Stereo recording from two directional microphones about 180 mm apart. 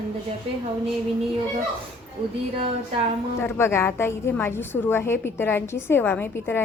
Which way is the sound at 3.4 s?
15° left (ahead or behind).